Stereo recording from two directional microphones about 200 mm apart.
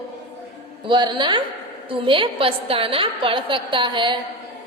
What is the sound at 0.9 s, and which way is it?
A woman's voice, 25° right (ahead or behind).